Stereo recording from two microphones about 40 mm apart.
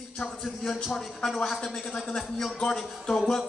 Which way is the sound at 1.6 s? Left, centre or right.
Left.